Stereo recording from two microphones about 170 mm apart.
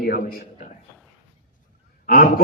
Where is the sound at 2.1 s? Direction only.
55° left (ahead or behind).